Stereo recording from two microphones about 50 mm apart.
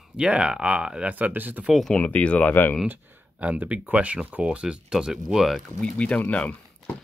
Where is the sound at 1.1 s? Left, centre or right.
Right.